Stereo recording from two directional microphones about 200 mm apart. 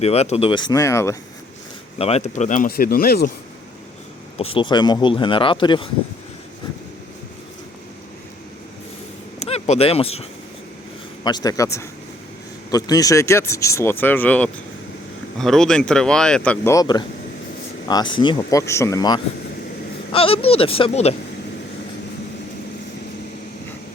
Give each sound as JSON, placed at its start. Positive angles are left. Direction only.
{"t": 0.0, "sound": "speech", "side_deg": 30}
{"t": 2.0, "sound": "speech", "side_deg": 30}
{"t": 4.4, "sound": "speech", "side_deg": 25}
{"t": 9.4, "sound": "speech", "side_deg": 30}
{"t": 16.7, "sound": "speech", "side_deg": 20}